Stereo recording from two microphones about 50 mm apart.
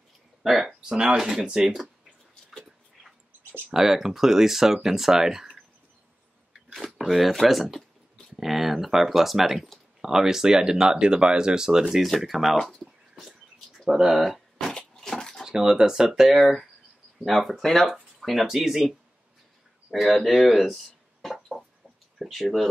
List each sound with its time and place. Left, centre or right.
0.4 s speech: centre
0.8 s speech: centre
3.7 s speech: centre
6.5 s a sound: centre
7.0 s speech: centre
11.9 s speech: centre
12.5 s speech: centre
13.2 s bird: centre
14.2 s a sound: centre
14.7 s a sound: centre
15.4 s speech: centre
19.9 s speech: centre
20.2 s a sound: centre
22.2 s speech: centre